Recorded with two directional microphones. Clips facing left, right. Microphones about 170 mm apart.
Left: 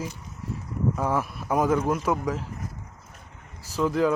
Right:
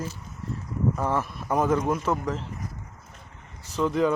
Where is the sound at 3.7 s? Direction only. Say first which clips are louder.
Even; 5° left (ahead or behind).